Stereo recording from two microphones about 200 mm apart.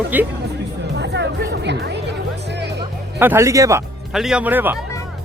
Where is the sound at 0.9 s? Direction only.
55° right (ahead or behind).